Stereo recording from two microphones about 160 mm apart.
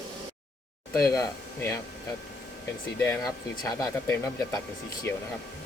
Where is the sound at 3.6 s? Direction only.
20° left (ahead or behind).